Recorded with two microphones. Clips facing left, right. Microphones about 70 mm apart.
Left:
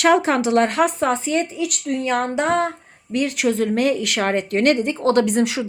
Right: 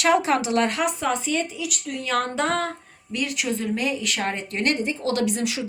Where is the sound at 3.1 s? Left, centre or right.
Left.